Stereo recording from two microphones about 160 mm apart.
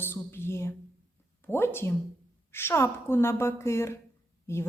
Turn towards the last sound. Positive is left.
turn(degrees=15)  # may be behind; listen again after turning